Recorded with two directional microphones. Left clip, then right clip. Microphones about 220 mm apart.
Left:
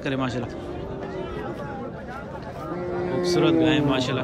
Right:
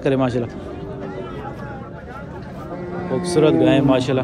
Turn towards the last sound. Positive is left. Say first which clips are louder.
# right 6 dB
turn(degrees=5)  # may be behind; listen again after turning